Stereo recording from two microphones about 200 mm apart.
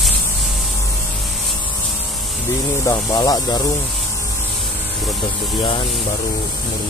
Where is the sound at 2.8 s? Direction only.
20° left (ahead or behind).